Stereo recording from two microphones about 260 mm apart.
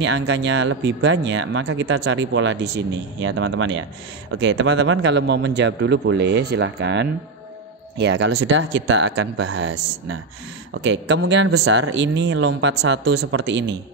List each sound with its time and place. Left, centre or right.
0.0 s speech: right